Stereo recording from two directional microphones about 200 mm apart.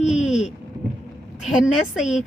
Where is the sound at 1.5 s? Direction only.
Centre (ahead or behind).